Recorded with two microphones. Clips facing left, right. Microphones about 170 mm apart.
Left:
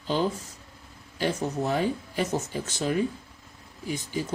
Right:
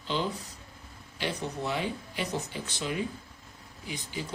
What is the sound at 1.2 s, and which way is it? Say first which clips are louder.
Speech: left 6 dB; 45° left (ahead or behind).